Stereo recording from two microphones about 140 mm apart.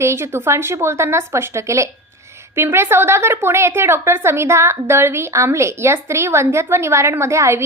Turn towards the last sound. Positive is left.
turn(degrees=-20)  # may be behind; listen again after turning